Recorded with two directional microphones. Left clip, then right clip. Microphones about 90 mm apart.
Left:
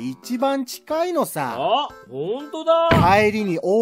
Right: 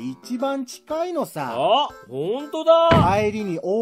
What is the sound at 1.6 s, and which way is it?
A woman's voice, 35° right (ahead or behind).